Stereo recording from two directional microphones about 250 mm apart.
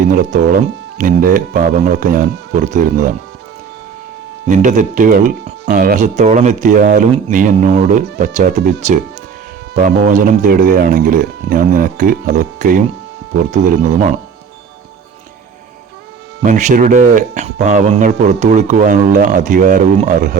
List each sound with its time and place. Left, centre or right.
0.1 s speech: right
4.4 s speech: right
16.4 s speech: right